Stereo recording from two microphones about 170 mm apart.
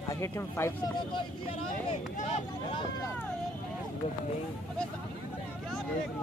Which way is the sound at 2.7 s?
30° left (ahead or behind).